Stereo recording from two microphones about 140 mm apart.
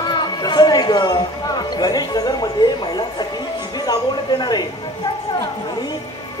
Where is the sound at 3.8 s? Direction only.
30° left (ahead or behind).